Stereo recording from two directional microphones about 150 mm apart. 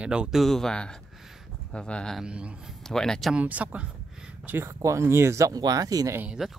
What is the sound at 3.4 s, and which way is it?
Speech, 10° right (ahead or behind).